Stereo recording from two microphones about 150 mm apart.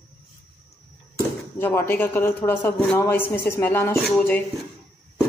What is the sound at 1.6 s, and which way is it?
Speech, 15° left (ahead or behind).